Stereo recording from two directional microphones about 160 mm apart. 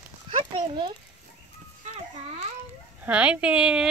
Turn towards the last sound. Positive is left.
turn(degrees=-5)  # may be behind; listen again after turning